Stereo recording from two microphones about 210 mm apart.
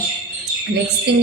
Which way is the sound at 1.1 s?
55° right (ahead or behind).